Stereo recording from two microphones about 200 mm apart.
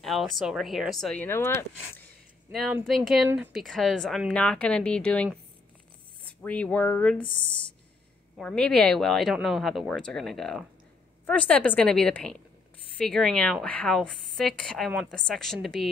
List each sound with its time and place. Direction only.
0.0 s speech: centre (ahead or behind)
1.2 s a woman's voice: 10° left (ahead or behind)
2.5 s speech: centre (ahead or behind)
6.4 s a woman's voice: 5° left (ahead or behind)
7.2 s speech: 25° left (ahead or behind)
8.4 s a woman's voice: 5° left (ahead or behind)